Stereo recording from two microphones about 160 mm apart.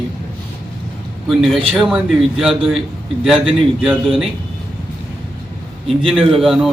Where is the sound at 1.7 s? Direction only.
Centre (ahead or behind).